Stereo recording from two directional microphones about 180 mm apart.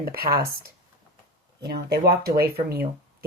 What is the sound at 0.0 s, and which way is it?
Speech, 55° right (ahead or behind).